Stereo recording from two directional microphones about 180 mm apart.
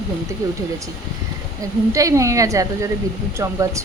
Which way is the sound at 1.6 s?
20° right (ahead or behind).